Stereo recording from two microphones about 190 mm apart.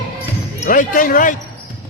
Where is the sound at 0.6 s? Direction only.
45° left (ahead or behind).